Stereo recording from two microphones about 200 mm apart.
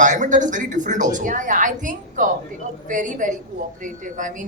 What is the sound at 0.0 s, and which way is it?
A woman's voice, 40° right (ahead or behind).